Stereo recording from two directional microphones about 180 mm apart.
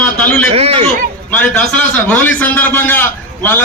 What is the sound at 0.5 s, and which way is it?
Speech, 35° right (ahead or behind).